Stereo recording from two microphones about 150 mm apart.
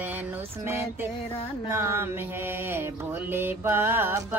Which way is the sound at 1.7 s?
15° right (ahead or behind).